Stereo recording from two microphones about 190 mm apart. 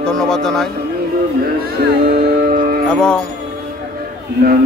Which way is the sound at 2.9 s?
5° left (ahead or behind).